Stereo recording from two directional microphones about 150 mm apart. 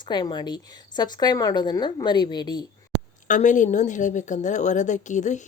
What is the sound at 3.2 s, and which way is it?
Speech, 55° left (ahead or behind).